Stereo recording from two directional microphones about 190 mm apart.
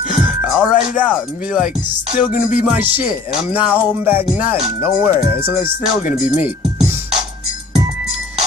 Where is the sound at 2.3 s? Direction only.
45° left (ahead or behind).